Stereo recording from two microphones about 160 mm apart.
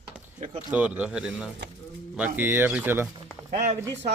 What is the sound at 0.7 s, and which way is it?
A man's voice, 10° right (ahead or behind).